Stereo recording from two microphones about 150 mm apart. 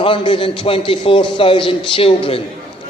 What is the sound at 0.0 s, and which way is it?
A man's voice, 35° left (ahead or behind).